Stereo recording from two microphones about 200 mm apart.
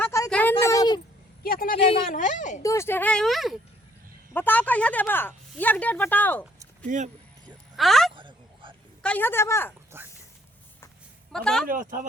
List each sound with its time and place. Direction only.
0.0 s a sound: 15° left (ahead or behind)
0.6 s a sound: 15° left (ahead or behind)
1.5 s a sound: 45° left (ahead or behind)
1.8 s speech: 25° left (ahead or behind)
2.1 s a woman's voice: 40° left (ahead or behind)
2.6 s speech: 15° left (ahead or behind)
6.8 s speech: 40° right (ahead or behind)
7.8 s speech: centre (ahead or behind)
8.1 s a sound: 25° right (ahead or behind)
9.0 s speech: 10° left (ahead or behind)
9.9 s speech: 10° right (ahead or behind)
11.3 s speech: 5° left (ahead or behind)
11.6 s speech: 45° right (ahead or behind)